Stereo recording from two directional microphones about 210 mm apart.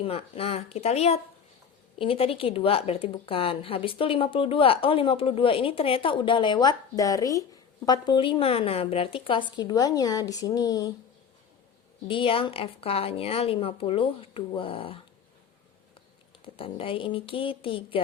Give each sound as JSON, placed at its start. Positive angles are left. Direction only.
{"t": 0.0, "sound": "speech", "side_deg": 30}
{"t": 12.0, "sound": "speech", "side_deg": 25}
{"t": 16.6, "sound": "speech", "side_deg": 25}